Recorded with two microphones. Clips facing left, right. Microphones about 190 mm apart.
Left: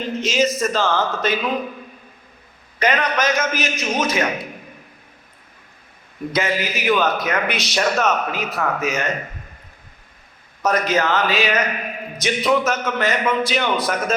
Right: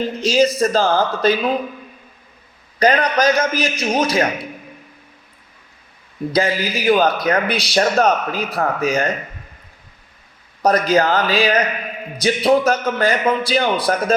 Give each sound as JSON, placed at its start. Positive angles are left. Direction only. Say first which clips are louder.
{"t": 0.2, "sound": "a man's voice", "louder": "right 4 dB", "side_deg": -35}
{"t": 2.7, "sound": "a man's voice", "louder": "right 4 dB", "side_deg": -35}
{"t": 6.3, "sound": "a man's voice", "louder": "right 3 dB", "side_deg": -35}
{"t": 10.6, "sound": "a man's voice", "louder": "right 4 dB", "side_deg": -35}